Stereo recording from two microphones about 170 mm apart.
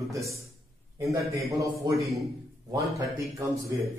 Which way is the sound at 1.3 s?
20° right (ahead or behind).